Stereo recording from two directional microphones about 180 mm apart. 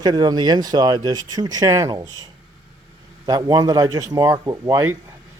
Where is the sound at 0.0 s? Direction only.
20° right (ahead or behind).